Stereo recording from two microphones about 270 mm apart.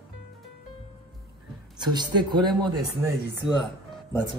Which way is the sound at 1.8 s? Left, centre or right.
Centre.